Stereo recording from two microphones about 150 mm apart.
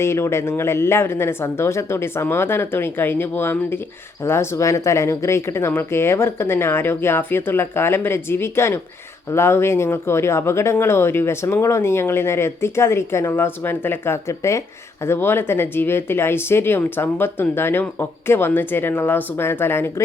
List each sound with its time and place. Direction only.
0.0 s speech: 15° left (ahead or behind)